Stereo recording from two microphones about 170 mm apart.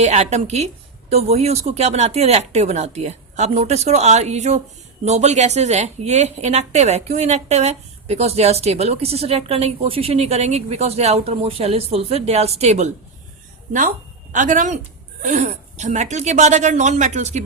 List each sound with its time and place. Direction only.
0.0 s a woman's voice: 40° right (ahead or behind)
14.3 s speech: 45° right (ahead or behind)